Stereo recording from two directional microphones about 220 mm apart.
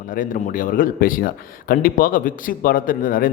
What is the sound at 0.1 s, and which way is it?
A man's voice, 35° left (ahead or behind).